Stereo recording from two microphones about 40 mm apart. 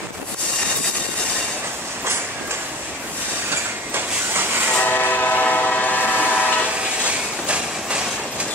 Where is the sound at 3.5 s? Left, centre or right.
Right.